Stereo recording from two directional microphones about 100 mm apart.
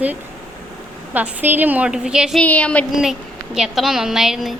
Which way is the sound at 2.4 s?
15° left (ahead or behind).